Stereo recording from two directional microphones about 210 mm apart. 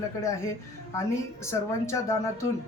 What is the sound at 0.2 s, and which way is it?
Speech, 15° left (ahead or behind).